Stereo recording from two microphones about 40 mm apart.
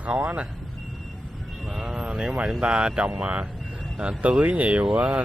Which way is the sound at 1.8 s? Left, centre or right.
Right.